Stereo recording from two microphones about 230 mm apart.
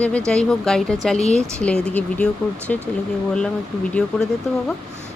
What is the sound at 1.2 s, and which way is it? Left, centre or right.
Speech, left.